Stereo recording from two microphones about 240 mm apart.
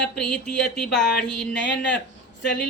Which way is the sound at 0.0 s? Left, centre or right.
Centre.